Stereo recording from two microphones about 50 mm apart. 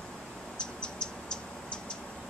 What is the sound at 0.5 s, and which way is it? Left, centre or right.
Cricket, centre.